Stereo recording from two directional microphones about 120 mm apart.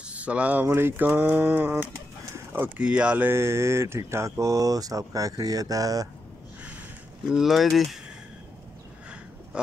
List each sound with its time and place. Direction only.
0.0 s a sound: 10° right (ahead or behind)
2.3 s speech: 20° right (ahead or behind)
7.2 s speech: 5° right (ahead or behind)